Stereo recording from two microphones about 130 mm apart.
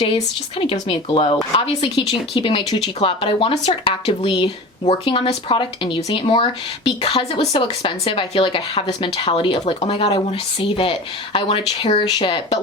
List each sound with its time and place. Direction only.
0.6 s speech: 45° left (ahead or behind)